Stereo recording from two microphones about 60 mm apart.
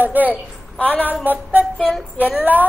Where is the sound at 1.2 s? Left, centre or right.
Right.